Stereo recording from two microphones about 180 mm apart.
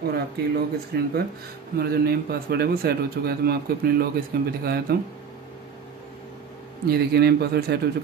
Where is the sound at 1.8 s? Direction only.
60° right (ahead or behind).